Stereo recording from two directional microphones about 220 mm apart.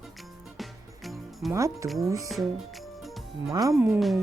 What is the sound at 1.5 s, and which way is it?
Speech, 15° right (ahead or behind).